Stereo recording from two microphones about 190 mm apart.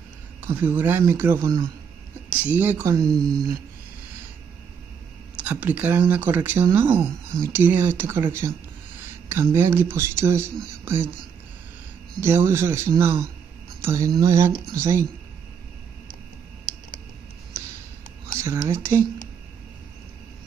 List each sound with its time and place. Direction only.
0.4 s speech: 10° right (ahead or behind)
5.4 s speech: 10° right (ahead or behind)
12.2 s speech: 15° right (ahead or behind)
18.4 s speech: 15° right (ahead or behind)